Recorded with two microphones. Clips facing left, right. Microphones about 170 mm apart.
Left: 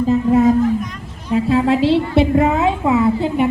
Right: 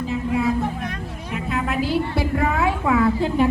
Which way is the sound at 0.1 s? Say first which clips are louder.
Left 9 dB; 45° left (ahead or behind).